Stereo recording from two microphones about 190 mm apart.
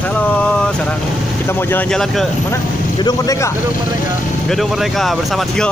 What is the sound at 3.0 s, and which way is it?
Speech, 20° left (ahead or behind).